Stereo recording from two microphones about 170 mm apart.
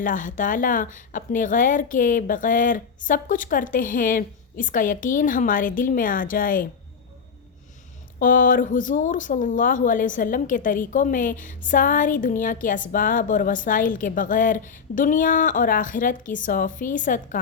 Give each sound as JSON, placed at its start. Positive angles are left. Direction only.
{"t": 0.0, "sound": "speech", "side_deg": 50}
{"t": 8.2, "sound": "speech", "side_deg": 55}